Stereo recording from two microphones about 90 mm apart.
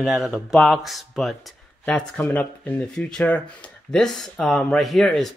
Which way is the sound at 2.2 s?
20° left (ahead or behind).